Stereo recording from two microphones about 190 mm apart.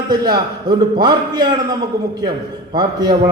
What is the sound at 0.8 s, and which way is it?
Speech, 20° right (ahead or behind).